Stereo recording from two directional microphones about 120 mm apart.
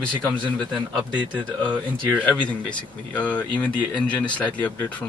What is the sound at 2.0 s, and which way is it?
Speech, 10° left (ahead or behind).